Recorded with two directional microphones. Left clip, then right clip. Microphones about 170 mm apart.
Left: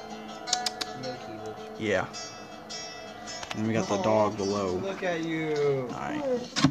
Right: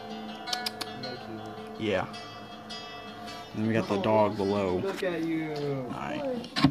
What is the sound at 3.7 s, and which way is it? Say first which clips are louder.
Speech: even; 10° right (ahead or behind).